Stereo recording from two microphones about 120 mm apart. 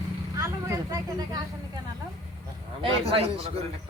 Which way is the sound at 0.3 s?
25° right (ahead or behind).